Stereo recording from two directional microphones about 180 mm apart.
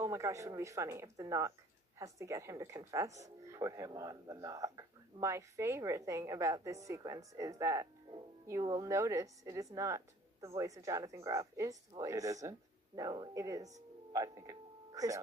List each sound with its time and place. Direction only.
0.0 s speech: 15° right (ahead or behind)